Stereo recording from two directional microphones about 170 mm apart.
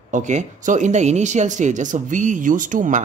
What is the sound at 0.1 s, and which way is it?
Speech, 45° right (ahead or behind).